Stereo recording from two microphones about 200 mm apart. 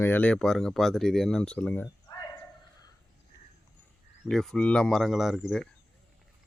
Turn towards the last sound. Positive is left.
turn(degrees=0)  # may be behind; listen again after turning